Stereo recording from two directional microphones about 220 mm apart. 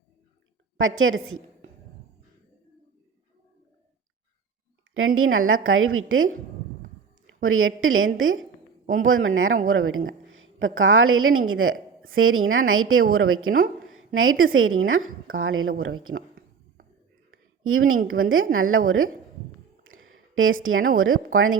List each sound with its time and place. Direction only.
0.8 s a woman's voice: 65° right (ahead or behind)
4.9 s a woman's voice: 70° right (ahead or behind)
7.4 s a woman's voice: 65° right (ahead or behind)
17.6 s a woman's voice: 65° right (ahead or behind)
19.8 s a sound: 65° right (ahead or behind)
21.3 s a woman's voice: 65° right (ahead or behind)